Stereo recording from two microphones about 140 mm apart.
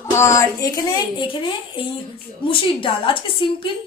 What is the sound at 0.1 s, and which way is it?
A woman's voice, 20° left (ahead or behind).